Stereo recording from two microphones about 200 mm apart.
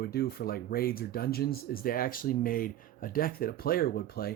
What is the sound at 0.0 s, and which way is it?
Speech, 50° left (ahead or behind).